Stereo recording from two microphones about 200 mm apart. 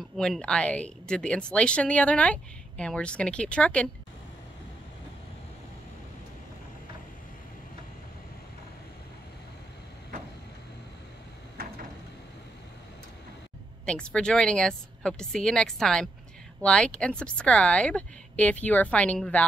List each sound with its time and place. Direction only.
0.0 s speech: centre (ahead or behind)
11.5 s a sound: 45° right (ahead or behind)
13.8 s speech: 5° left (ahead or behind)